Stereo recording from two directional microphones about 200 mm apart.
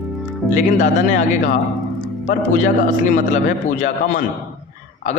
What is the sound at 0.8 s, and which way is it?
Speech, 40° left (ahead or behind).